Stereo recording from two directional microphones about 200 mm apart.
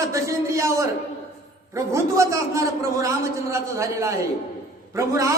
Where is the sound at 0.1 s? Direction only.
15° right (ahead or behind).